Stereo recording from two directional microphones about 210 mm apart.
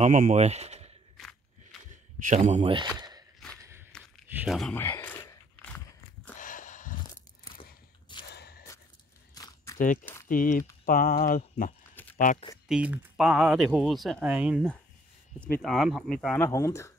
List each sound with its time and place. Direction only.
0.0 s speech: 35° right (ahead or behind)
1.1 s a sound: centre (ahead or behind)
2.2 s speech: 35° right (ahead or behind)
3.0 s walk: 20° right (ahead or behind)
4.3 s speech: 5° right (ahead or behind)
4.7 s a sound: 10° left (ahead or behind)
6.3 s a sound: 40° left (ahead or behind)
8.3 s gasp: 50° left (ahead or behind)
9.3 s biting: 15° left (ahead or behind)
10.2 s speech: 40° left (ahead or behind)
11.9 s a sound: 10° left (ahead or behind)
12.2 s speech: 40° left (ahead or behind)
12.6 s speech: 5° right (ahead or behind)
16.4 s speech: 15° left (ahead or behind)